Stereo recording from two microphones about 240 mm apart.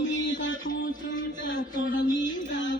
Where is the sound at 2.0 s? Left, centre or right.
Centre.